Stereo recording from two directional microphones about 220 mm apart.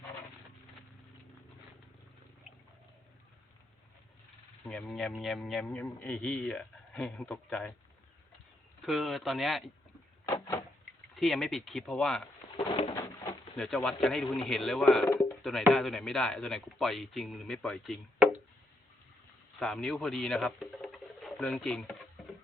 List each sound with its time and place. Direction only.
4.7 s speech: 5° left (ahead or behind)
8.9 s speech: centre (ahead or behind)
10.2 s a sound: 15° left (ahead or behind)
11.2 s speech: centre (ahead or behind)
12.5 s bird: 25° left (ahead or behind)
13.6 s speech: centre (ahead or behind)
19.5 s speech: centre (ahead or behind)